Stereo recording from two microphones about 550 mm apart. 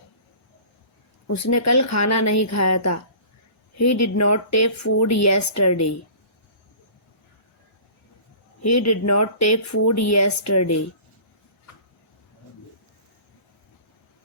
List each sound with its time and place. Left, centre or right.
1.3 s speech: left
8.6 s speech: left